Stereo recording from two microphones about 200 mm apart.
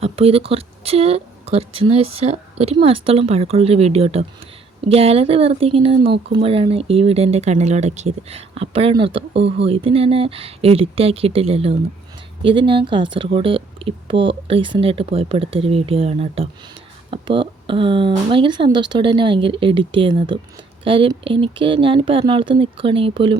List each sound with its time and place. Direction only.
0.0 s speech: 30° right (ahead or behind)